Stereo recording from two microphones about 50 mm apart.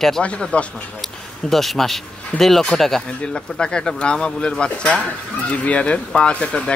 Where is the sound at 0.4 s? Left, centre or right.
Centre.